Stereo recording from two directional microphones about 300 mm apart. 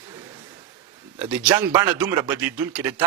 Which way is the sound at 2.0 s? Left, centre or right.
Centre.